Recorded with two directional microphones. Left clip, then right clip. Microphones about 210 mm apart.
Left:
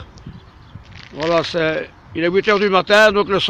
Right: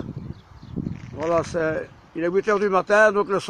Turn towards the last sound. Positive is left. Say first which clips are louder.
# left 5 dB
turn(degrees=0)  # may be behind; listen again after turning